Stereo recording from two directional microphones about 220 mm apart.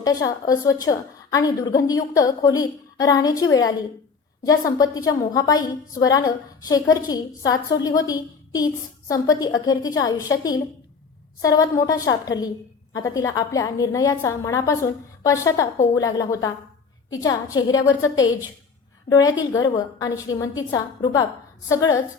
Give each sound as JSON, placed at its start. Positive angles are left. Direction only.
{"t": 0.0, "sound": "a woman's voice", "side_deg": 15}